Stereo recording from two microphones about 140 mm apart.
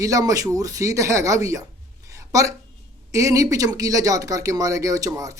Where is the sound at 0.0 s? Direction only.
25° right (ahead or behind).